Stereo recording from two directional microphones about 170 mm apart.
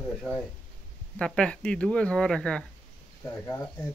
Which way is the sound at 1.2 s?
5° left (ahead or behind).